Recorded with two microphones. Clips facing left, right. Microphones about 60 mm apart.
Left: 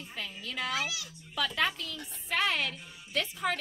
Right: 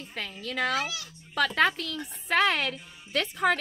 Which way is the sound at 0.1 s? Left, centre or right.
Right.